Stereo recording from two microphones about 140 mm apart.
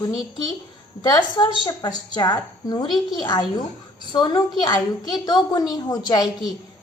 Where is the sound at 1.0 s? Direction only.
30° left (ahead or behind).